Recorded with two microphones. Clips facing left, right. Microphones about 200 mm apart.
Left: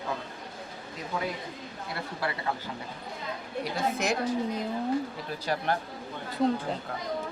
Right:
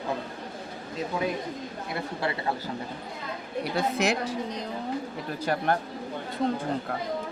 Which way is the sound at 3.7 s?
70° right (ahead or behind).